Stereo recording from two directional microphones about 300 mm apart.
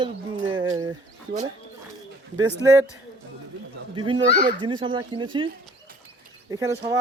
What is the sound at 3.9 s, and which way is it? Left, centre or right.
Speech, centre.